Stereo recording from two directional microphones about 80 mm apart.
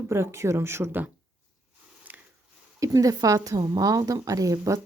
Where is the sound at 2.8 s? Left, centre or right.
Right.